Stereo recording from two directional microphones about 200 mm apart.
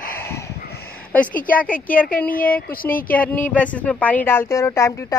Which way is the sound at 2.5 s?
45° left (ahead or behind).